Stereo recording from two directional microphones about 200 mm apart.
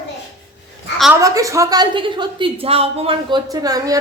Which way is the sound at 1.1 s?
15° right (ahead or behind).